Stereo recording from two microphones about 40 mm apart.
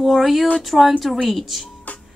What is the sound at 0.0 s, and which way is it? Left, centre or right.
Speech, centre.